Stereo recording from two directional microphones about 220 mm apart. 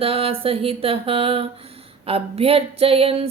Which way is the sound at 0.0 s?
25° right (ahead or behind).